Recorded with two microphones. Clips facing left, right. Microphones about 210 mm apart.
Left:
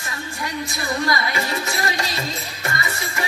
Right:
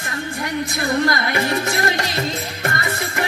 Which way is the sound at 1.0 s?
55° right (ahead or behind).